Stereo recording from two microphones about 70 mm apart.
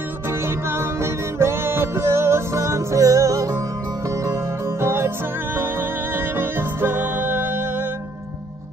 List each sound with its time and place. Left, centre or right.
1.4 s music: right
4.3 s music: right
6.1 s music: right